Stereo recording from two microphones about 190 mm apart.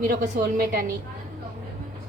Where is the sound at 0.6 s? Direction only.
50° right (ahead or behind).